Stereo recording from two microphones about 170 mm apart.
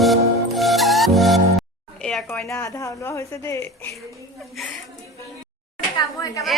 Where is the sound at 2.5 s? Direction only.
20° left (ahead or behind).